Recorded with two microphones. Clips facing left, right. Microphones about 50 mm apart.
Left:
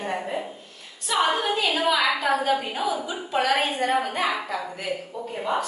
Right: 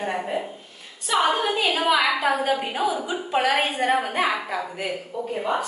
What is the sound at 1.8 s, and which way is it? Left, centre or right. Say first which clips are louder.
A woman's voice: right 2 dB; centre.